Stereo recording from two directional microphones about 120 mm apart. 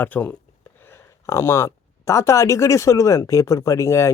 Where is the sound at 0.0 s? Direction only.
15° left (ahead or behind).